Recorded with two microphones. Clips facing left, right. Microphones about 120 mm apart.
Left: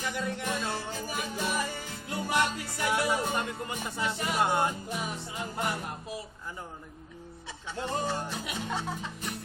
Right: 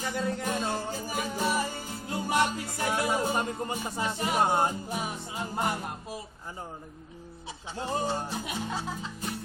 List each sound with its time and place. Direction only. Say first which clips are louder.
0.0 s music: right 2 dB; 35° right (ahead or behind)
7.8 s music: right 1 dB; 30° right (ahead or behind)